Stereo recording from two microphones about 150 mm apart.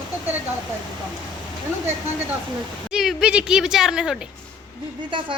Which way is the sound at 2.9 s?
5° right (ahead or behind).